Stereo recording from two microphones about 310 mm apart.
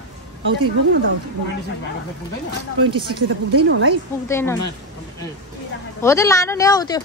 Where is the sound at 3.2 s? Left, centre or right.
Right.